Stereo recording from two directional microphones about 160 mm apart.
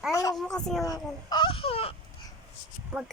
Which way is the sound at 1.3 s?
30° left (ahead or behind).